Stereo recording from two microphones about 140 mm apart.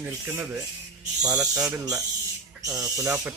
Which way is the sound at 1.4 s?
25° right (ahead or behind).